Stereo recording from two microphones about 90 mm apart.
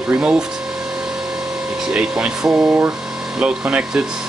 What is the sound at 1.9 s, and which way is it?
Speech, 10° right (ahead or behind).